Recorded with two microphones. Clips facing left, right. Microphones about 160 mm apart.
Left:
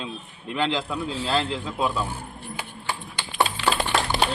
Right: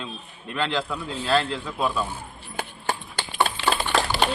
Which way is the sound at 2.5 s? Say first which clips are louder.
Right 4 dB; 50° right (ahead or behind).